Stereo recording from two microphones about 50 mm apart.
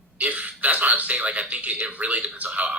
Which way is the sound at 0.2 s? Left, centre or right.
Right.